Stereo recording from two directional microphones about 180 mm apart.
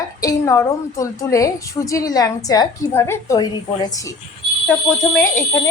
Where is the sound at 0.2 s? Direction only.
20° left (ahead or behind).